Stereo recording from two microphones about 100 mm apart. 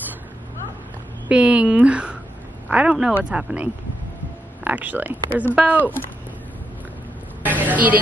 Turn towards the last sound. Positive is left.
turn(degrees=-15)  # may be behind; listen again after turning